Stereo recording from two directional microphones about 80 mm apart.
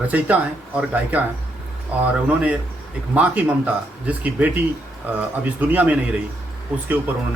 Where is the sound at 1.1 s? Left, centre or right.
Centre.